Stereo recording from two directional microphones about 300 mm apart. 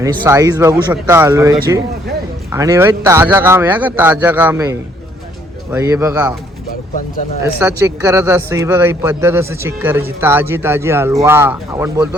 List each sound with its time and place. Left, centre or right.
0.0 s speech: centre
7.6 s a man's voice: centre